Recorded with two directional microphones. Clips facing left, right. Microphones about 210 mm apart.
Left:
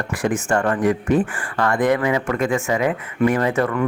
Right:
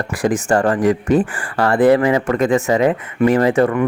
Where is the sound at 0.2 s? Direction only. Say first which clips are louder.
Right 4 dB; 35° right (ahead or behind).